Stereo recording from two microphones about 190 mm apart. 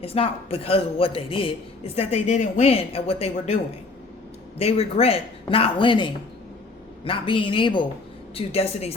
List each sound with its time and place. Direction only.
0.0 s a man's voice: 30° left (ahead or behind)